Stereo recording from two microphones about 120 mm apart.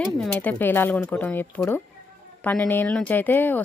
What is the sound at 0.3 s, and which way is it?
Speech, 15° left (ahead or behind).